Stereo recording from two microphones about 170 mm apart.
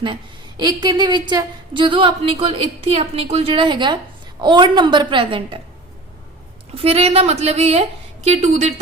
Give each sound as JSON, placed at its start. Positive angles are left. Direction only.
{"t": 0.0, "sound": "a woman's voice", "side_deg": -25}
{"t": 6.7, "sound": "a woman's voice", "side_deg": -35}